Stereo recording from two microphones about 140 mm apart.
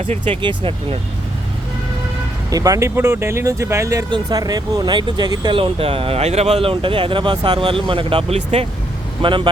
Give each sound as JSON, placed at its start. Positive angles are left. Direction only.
{"t": 0.3, "sound": "speech", "side_deg": -40}
{"t": 2.5, "sound": "speech", "side_deg": -25}
{"t": 8.4, "sound": "speech", "side_deg": -50}
{"t": 9.2, "sound": "speech", "side_deg": -35}